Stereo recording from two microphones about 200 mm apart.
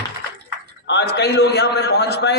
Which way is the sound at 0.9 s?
55° left (ahead or behind).